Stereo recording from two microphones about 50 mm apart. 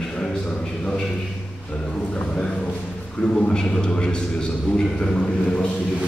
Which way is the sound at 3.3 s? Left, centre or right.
Centre.